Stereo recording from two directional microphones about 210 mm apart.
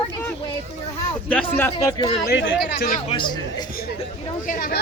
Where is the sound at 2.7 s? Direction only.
45° left (ahead or behind).